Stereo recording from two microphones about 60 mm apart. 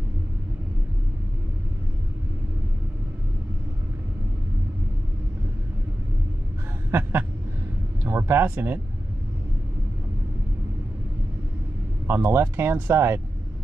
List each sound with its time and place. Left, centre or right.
6.9 s a sound: right
8.0 s speech: right
12.1 s speech: right